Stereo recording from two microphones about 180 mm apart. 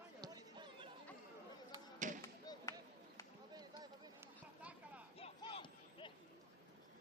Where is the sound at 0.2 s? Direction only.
25° right (ahead or behind).